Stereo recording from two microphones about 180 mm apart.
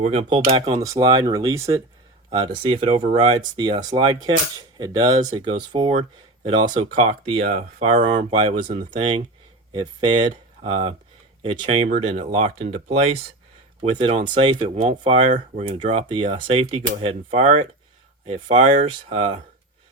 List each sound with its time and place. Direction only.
0.0 s speech: 40° right (ahead or behind)
0.8 s speech: 20° right (ahead or behind)
5.5 s speech: 30° right (ahead or behind)
6.7 s speech: 40° right (ahead or behind)
8.3 s speech: 40° right (ahead or behind)
8.5 s speech: 30° right (ahead or behind)
10.2 s speech: 40° right (ahead or behind)